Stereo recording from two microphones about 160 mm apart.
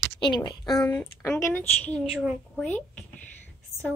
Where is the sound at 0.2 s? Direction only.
30° left (ahead or behind).